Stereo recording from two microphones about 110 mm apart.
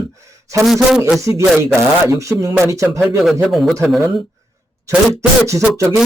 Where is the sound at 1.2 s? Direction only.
25° right (ahead or behind).